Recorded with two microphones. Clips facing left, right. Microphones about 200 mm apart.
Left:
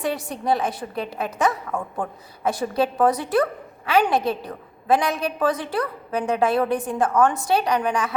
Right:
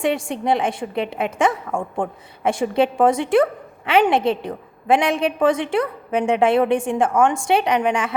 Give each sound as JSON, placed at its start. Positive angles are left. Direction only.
{"t": 0.0, "sound": "a woman's voice", "side_deg": -25}